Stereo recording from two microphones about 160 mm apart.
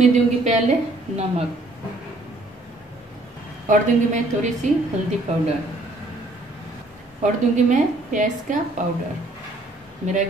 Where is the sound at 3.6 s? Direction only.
50° right (ahead or behind).